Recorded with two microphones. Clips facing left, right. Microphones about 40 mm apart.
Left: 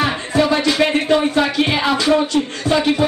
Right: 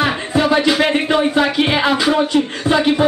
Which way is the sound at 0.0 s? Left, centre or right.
Centre.